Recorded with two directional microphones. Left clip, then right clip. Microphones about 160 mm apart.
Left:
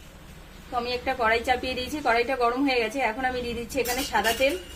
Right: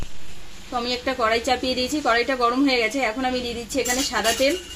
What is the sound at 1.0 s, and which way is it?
A woman's voice, 55° right (ahead or behind).